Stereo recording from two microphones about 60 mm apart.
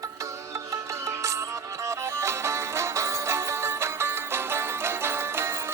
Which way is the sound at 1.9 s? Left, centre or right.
Right.